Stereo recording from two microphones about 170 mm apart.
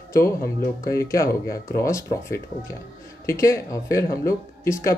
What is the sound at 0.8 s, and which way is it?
Speech, 15° left (ahead or behind).